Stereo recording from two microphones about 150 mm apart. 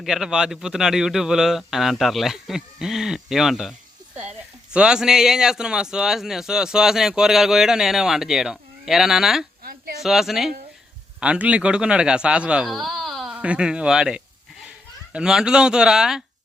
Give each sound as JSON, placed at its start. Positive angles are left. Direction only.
{"t": 0.0, "sound": "speech", "side_deg": -5}
{"t": 9.6, "sound": "a sound", "side_deg": -85}
{"t": 10.0, "sound": "speech", "side_deg": 0}